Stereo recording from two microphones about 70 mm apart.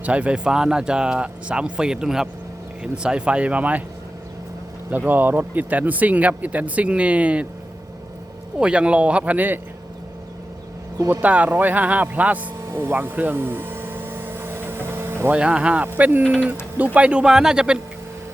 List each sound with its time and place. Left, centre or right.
0.0 s speech: centre
4.9 s speech: right
8.5 s speech: centre
11.1 s speech: right
12.6 s a sound: right
15.3 s speech: centre
16.2 s speech: centre
16.7 s speech: right